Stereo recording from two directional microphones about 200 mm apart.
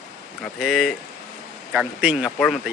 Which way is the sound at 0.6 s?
Centre (ahead or behind).